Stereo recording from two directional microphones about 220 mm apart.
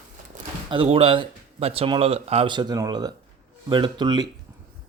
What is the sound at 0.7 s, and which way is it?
Speech, 25° right (ahead or behind).